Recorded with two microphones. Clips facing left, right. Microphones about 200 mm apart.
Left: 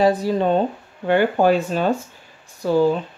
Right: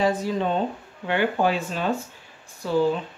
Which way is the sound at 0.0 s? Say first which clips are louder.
Left 5 dB; 35° left (ahead or behind).